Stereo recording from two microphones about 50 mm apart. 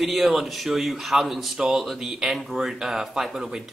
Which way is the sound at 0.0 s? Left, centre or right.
Centre.